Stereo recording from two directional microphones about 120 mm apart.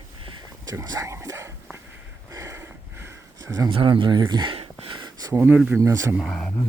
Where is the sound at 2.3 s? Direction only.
25° right (ahead or behind).